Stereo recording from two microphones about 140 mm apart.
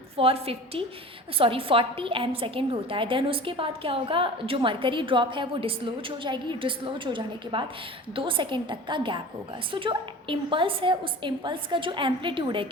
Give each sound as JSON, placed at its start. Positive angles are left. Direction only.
{"t": 0.2, "sound": "a woman's voice", "side_deg": -45}